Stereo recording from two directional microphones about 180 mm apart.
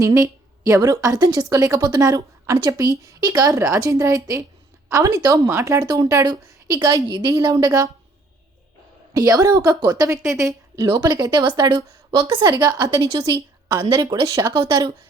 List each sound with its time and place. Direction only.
0.0 s a woman's voice: 20° right (ahead or behind)
9.1 s a woman's voice: 20° right (ahead or behind)